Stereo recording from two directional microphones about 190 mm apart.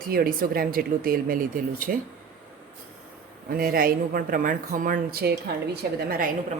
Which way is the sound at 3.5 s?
50° right (ahead or behind).